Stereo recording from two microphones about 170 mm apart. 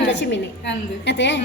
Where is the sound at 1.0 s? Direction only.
90° left.